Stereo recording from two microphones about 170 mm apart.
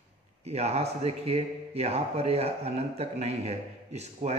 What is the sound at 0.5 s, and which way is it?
A man's voice, 40° right (ahead or behind).